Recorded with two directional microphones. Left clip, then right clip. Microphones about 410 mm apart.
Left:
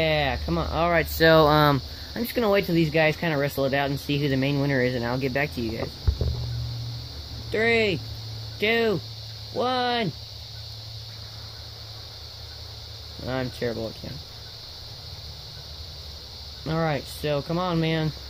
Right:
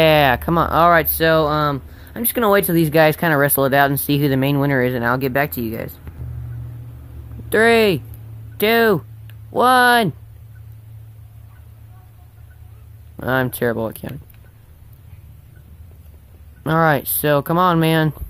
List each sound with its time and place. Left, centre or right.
0.0 s speech: centre
7.5 s speech: centre
13.2 s speech: centre
16.6 s speech: centre